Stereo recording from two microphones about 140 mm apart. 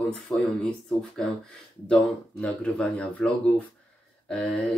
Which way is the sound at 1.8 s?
5° left (ahead or behind).